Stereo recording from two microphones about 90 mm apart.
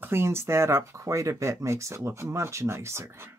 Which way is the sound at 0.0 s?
25° right (ahead or behind).